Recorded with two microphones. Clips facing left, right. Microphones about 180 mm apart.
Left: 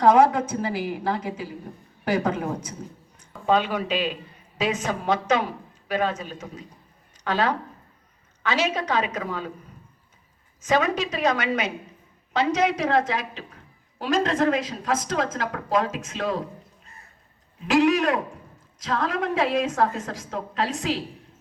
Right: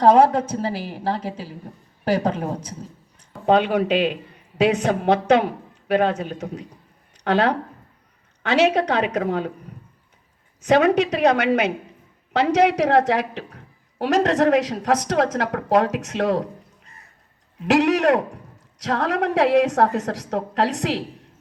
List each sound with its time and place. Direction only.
0.0 s a woman's voice: 35° right (ahead or behind)
3.4 s a man's voice: 65° right (ahead or behind)
10.6 s a man's voice: 65° right (ahead or behind)
17.6 s a woman's voice: 70° right (ahead or behind)